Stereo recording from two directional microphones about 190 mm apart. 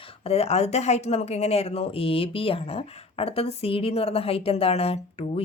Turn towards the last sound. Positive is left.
turn(degrees=30)  # may be behind; listen again after turning